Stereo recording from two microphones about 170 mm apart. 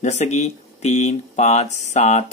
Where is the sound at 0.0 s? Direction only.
40° left (ahead or behind).